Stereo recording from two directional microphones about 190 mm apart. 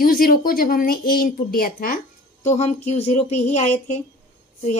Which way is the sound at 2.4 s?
35° left (ahead or behind).